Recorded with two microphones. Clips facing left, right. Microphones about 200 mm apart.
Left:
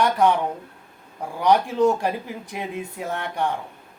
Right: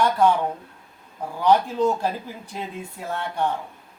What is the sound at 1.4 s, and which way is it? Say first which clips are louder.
Speech: left 1 dB; 15° left (ahead or behind).